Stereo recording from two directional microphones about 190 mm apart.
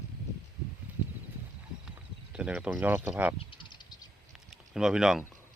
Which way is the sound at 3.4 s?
25° left (ahead or behind).